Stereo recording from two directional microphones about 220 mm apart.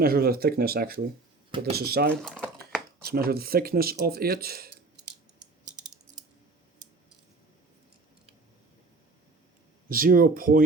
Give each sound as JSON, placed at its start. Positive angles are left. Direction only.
{"t": 0.0, "sound": "speech", "side_deg": -45}
{"t": 2.2, "sound": "typing", "side_deg": 0}
{"t": 3.1, "sound": "speech", "side_deg": -45}
{"t": 9.9, "sound": "speech", "side_deg": -40}